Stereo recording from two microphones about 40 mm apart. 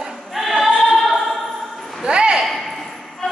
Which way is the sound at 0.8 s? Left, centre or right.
Centre.